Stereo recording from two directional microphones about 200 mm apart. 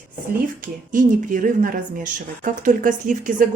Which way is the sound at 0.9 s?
40° right (ahead or behind).